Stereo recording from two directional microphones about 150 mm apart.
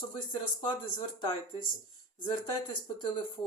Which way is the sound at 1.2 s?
30° left (ahead or behind).